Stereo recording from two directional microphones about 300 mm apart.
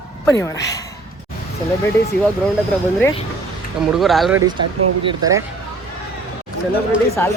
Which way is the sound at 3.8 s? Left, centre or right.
Centre.